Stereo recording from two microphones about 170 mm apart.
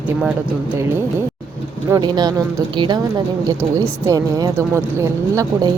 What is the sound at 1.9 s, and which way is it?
Speech, 25° right (ahead or behind).